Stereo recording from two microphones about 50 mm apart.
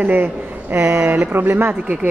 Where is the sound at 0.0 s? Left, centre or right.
Right.